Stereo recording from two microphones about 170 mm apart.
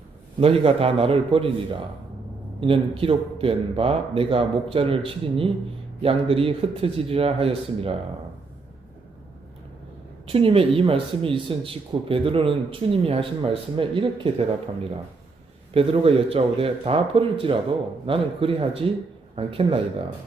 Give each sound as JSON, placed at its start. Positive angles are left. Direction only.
{"t": 0.3, "sound": "speech", "side_deg": -35}
{"t": 2.6, "sound": "speech", "side_deg": -30}
{"t": 10.2, "sound": "speech", "side_deg": -35}
{"t": 15.7, "sound": "speech", "side_deg": -35}